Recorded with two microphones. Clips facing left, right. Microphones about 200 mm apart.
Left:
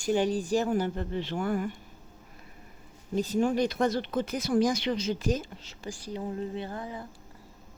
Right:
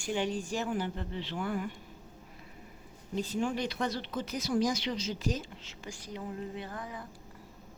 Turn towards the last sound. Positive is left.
turn(degrees=30)  # may be behind; listen again after turning